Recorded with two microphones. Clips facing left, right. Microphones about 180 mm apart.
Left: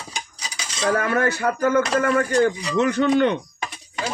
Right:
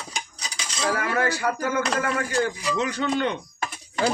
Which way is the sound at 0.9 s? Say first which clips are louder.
Left 4 dB; 55° left (ahead or behind).